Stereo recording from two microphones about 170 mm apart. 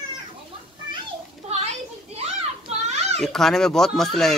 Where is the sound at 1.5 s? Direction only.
40° right (ahead or behind).